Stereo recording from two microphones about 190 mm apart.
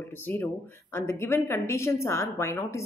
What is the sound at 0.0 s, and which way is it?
Speech, 10° left (ahead or behind).